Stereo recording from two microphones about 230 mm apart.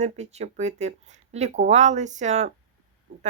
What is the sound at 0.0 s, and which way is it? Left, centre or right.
Speech, right.